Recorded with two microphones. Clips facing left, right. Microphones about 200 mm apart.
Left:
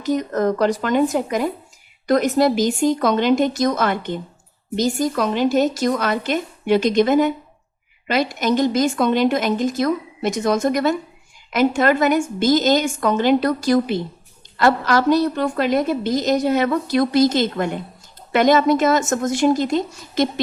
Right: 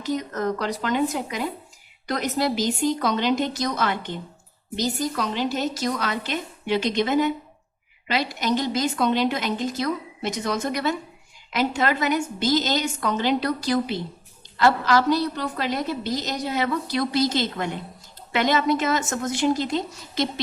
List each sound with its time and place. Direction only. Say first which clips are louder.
0.0 s a woman's voice: left 6 dB; 45° left (ahead or behind)